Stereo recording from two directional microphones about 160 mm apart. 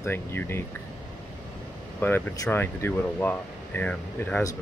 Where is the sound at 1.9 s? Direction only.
15° left (ahead or behind).